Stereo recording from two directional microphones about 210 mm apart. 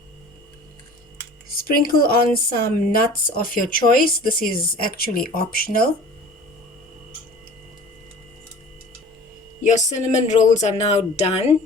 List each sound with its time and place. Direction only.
1.5 s speech: 45° left (ahead or behind)
9.6 s speech: 35° left (ahead or behind)